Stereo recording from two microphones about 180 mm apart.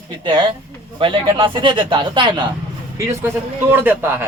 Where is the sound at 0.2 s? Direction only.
25° right (ahead or behind).